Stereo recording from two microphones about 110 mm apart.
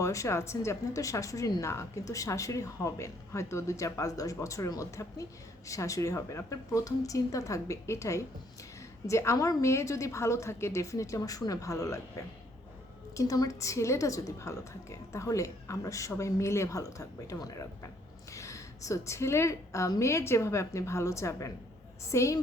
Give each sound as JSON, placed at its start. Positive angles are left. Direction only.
{"t": 0.0, "sound": "a woman's voice", "side_deg": 25}